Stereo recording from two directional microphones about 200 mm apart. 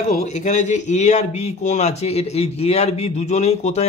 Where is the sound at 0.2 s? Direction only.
35° left (ahead or behind).